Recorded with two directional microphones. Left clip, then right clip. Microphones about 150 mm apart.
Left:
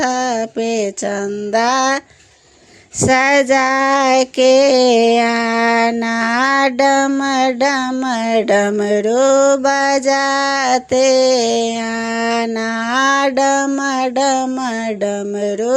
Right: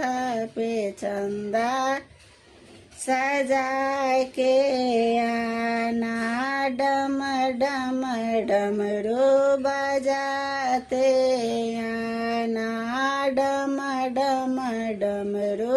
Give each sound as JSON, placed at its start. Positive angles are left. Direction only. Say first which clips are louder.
{"t": 0.0, "sound": "a sound", "louder": "left 9 dB", "side_deg": 30}
{"t": 1.5, "sound": "child singing", "louder": "left 10 dB", "side_deg": 35}
{"t": 3.1, "sound": "child singing", "louder": "left 11 dB", "side_deg": 35}